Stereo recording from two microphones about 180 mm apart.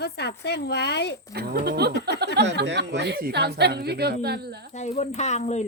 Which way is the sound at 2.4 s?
75° right (ahead or behind).